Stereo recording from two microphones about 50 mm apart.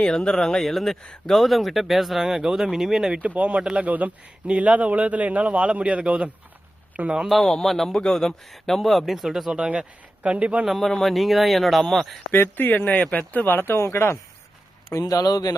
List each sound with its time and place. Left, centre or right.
0.0 s speech: centre
3.2 s a man's voice: right
7.3 s speech: centre
10.2 s a man's voice: right
10.7 s speech: centre
12.3 s speech: left
13.8 s speech: left
14.8 s speech: left